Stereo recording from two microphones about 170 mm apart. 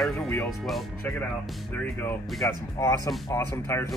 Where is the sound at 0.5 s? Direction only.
Centre (ahead or behind).